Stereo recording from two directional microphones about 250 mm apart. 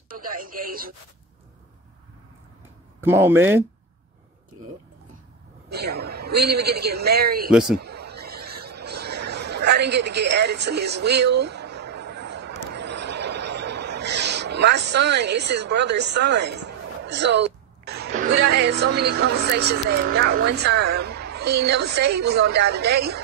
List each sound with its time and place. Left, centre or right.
0.3 s a woman's voice: right
3.0 s speech: centre
5.7 s a woman's voice: right
7.5 s a man's voice: centre
7.8 s speech: right